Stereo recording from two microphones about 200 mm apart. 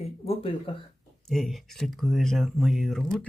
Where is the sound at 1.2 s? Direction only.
Centre (ahead or behind).